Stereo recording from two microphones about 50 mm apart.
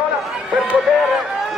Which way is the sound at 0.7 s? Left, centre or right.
Centre.